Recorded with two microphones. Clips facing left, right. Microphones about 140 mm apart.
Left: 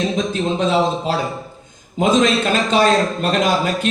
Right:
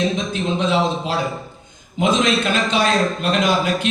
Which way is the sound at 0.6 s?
40° left (ahead or behind).